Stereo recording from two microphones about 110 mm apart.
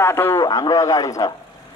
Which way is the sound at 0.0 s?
20° left (ahead or behind).